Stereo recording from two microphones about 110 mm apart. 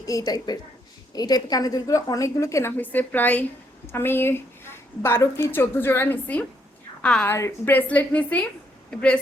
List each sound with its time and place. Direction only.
0.1 s a woman's voice: 35° left (ahead or behind)
2.7 s a woman's voice: 15° left (ahead or behind)
7.3 s a woman's voice: 25° left (ahead or behind)